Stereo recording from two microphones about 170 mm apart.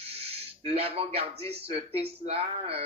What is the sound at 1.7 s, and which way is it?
Mantra, 35° right (ahead or behind).